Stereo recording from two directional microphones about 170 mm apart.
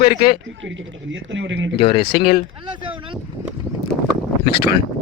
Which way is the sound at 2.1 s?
65° left (ahead or behind).